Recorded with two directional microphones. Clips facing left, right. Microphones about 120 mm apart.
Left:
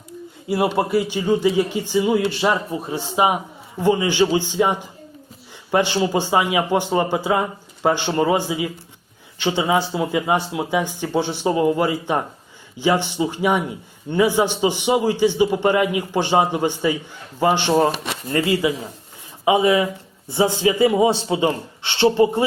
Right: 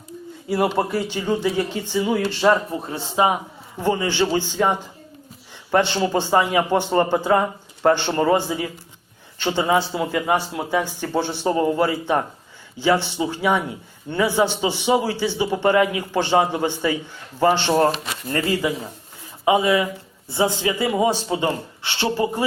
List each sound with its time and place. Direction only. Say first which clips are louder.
0.4 s a man's voice: left 1 dB; 10° left (ahead or behind)